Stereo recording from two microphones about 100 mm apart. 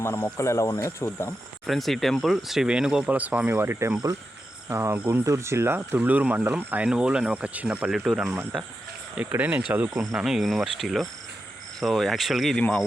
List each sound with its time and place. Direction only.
0.0 s speech: 25° left (ahead or behind)
1.6 s speech: centre (ahead or behind); by 5.2 s 20° right (ahead or behind)
5.2 s speech: 30° right (ahead or behind); by 8.4 s 5° right (ahead or behind)
9.3 s speech: 15° right (ahead or behind)
10.2 s speech: 5° right (ahead or behind)